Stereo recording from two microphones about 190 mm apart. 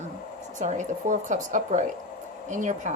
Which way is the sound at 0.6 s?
40° right (ahead or behind).